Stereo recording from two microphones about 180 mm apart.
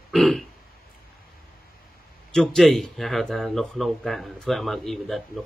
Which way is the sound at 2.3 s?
5° left (ahead or behind).